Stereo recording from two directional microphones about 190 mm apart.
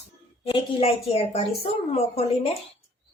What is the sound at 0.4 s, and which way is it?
Speech, 30° left (ahead or behind).